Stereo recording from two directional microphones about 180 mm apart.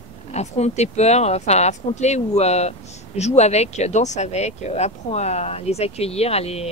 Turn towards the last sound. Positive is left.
turn(degrees=35)  # may be behind; listen again after turning